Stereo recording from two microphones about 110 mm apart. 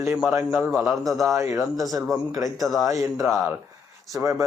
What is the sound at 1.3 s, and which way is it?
Speech, 25° right (ahead or behind).